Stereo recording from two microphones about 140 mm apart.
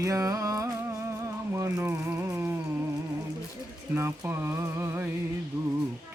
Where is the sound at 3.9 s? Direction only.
15° right (ahead or behind).